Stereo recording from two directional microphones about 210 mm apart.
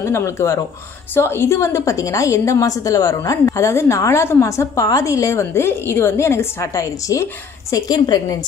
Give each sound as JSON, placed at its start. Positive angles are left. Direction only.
{"t": 0.0, "sound": "a woman's voice", "side_deg": 15}